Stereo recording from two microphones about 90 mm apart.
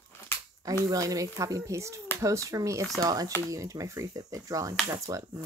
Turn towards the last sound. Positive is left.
turn(degrees=-40)  # may be behind; listen again after turning